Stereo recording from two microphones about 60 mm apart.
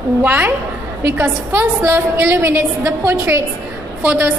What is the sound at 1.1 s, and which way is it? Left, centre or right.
A woman's voice, right.